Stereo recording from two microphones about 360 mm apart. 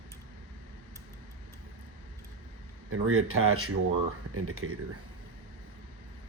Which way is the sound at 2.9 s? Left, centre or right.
Right.